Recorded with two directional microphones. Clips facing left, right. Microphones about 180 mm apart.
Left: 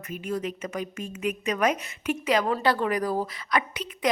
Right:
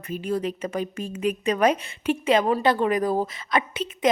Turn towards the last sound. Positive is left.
turn(degrees=-25)  # may be behind; listen again after turning